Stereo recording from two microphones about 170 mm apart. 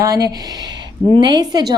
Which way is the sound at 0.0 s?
20° right (ahead or behind).